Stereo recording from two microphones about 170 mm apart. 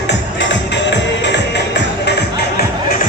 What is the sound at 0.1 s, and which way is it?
Music, 90° left.